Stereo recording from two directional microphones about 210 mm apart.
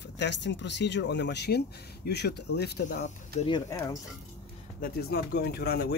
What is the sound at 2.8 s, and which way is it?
Speech, 35° left (ahead or behind).